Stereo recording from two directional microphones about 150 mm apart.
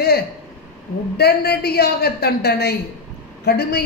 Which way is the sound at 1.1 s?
90° left.